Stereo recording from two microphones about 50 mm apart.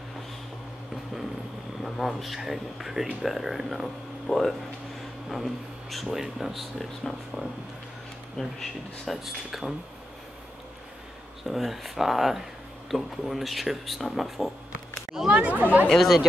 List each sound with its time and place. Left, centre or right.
1.8 s speech: centre
11.4 s speech: centre
15.2 s speech: right
15.9 s speech: centre